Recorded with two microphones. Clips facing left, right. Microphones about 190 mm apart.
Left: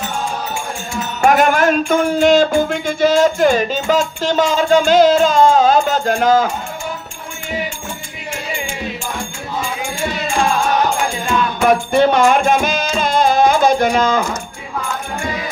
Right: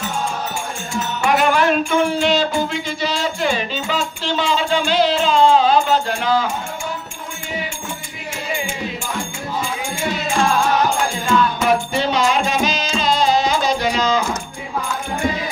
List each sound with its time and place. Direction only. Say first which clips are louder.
1.2 s music: left 4 dB; 45° left (ahead or behind)
11.6 s music: left 5 dB; 55° left (ahead or behind)